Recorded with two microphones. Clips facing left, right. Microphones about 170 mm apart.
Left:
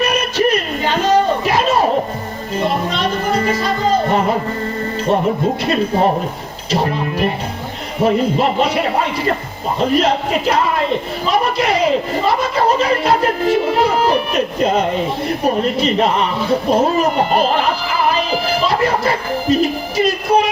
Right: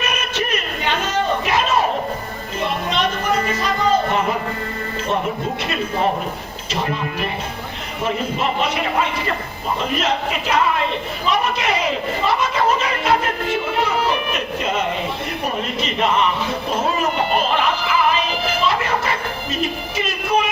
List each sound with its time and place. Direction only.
0.0 s a sound: 35° left (ahead or behind)
2.6 s music: 35° left (ahead or behind)
6.7 s speech: 40° left (ahead or behind)
20.0 s music: 35° left (ahead or behind)